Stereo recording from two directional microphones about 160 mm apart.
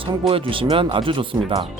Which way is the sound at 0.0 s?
35° right (ahead or behind).